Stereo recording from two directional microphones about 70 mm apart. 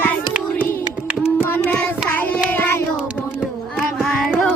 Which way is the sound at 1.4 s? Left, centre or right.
Left.